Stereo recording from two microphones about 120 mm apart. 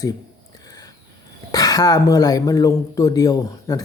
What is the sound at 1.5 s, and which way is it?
Speech, 30° left (ahead or behind).